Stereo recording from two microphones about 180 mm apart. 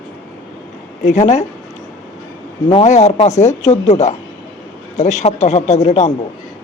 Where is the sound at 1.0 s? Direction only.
40° left (ahead or behind).